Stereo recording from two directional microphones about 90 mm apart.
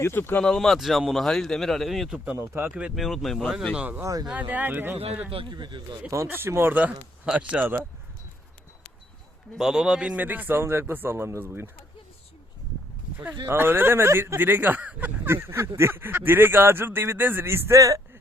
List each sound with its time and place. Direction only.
0.0 s speech: 25° left (ahead or behind)
0.4 s speech: 5° left (ahead or behind)
2.1 s speech: 15° right (ahead or behind)
2.9 s speech: centre (ahead or behind)
3.8 s speech: 20° right (ahead or behind)
4.0 s speech: 40° right (ahead or behind)
4.3 s speech: 15° right (ahead or behind)
5.3 s speech: 70° right (ahead or behind)
6.1 s speech: 35° right (ahead or behind)
9.6 s speech: 5° right (ahead or behind); by 11.7 s 25° right (ahead or behind)
13.5 s speech: 25° right (ahead or behind)